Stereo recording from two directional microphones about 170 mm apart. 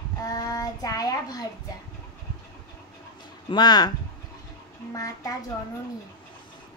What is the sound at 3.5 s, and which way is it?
Child singing, 25° left (ahead or behind).